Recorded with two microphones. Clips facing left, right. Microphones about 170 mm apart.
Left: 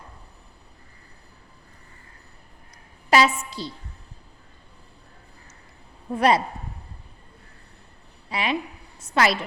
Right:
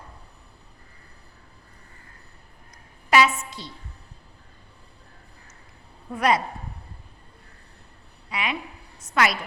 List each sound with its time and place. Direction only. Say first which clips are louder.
3.1 s a woman's voice: left 1 dB; 35° left (ahead or behind)
6.1 s a woman's voice: left 3 dB; 30° left (ahead or behind)
8.3 s a woman's voice: left 4 dB; 30° left (ahead or behind)